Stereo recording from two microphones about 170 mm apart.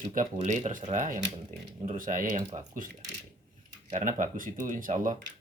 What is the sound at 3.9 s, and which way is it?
Speech, 50° right (ahead or behind).